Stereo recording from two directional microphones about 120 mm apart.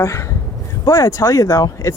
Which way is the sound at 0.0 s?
25° left (ahead or behind).